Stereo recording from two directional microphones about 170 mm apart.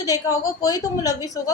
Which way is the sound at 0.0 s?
20° left (ahead or behind).